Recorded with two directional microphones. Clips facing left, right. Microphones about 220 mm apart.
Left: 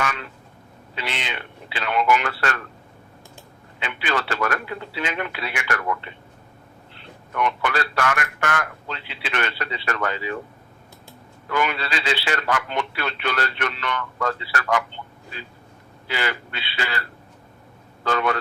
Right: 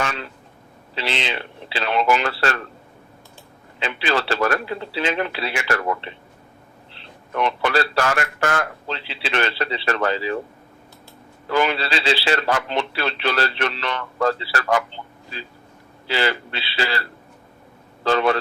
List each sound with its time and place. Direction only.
0.0 s a sound: 30° right (ahead or behind)
0.9 s a man's voice: 30° right (ahead or behind)
3.8 s a man's voice: 30° right (ahead or behind)
7.3 s a man's voice: 30° right (ahead or behind)
11.4 s a man's voice: 30° right (ahead or behind)
14.9 s a sound: 30° right (ahead or behind)
16.0 s a man's voice: 30° right (ahead or behind)